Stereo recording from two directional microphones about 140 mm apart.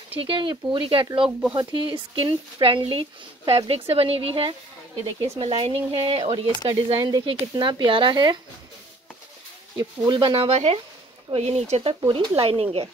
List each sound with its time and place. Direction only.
0.1 s a woman's voice: 40° right (ahead or behind)
9.8 s a woman's voice: 35° right (ahead or behind); by 11.9 s 50° right (ahead or behind)
12.1 s a woman's voice: 40° right (ahead or behind)